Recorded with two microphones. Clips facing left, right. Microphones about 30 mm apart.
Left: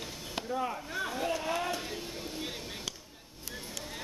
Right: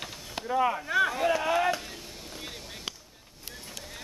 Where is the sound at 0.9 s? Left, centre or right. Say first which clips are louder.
Right 10 dB; right.